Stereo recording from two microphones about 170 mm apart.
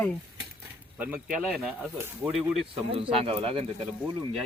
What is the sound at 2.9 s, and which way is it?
Speech, 35° right (ahead or behind).